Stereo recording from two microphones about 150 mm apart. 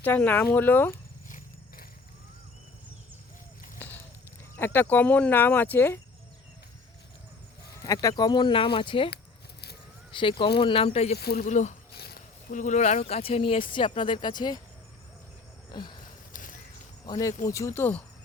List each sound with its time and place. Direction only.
0.0 s speech: 10° left (ahead or behind)
1.3 s vehicle: 70° left (ahead or behind)
3.8 s a sound: 10° left (ahead or behind)
4.5 s speech: 15° left (ahead or behind)
7.8 s speech: 20° left (ahead or behind)
10.1 s speech: 35° left (ahead or behind)
11.2 s speech: 90° left
11.4 s speech: 55° left (ahead or behind)
11.9 s speech: 75° left (ahead or behind); by 14.6 s 30° left (ahead or behind)
15.7 s a sound: 30° left (ahead or behind)
16.3 s a sound: 60° left (ahead or behind)
17.1 s speech: 25° left (ahead or behind)